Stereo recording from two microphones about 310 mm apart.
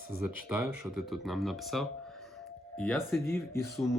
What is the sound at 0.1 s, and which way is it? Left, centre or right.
Speech, centre.